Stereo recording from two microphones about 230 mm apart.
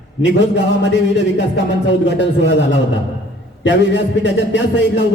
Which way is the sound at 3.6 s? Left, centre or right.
Left.